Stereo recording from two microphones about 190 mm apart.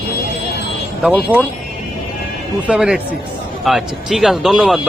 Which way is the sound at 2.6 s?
5° right (ahead or behind).